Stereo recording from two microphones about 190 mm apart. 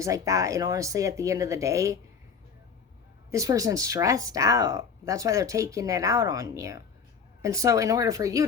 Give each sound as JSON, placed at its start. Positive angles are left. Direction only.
{"t": 0.0, "sound": "speech", "side_deg": -15}
{"t": 3.3, "sound": "speech", "side_deg": -15}